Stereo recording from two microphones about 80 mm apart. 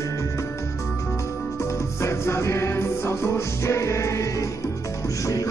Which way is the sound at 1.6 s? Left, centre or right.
Left.